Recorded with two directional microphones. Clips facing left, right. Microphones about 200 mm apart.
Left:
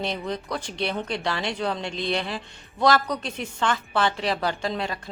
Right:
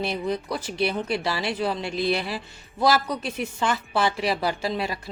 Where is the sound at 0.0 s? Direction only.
10° right (ahead or behind).